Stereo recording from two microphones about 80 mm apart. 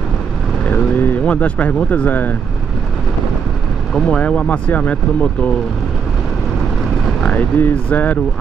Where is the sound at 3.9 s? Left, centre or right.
Centre.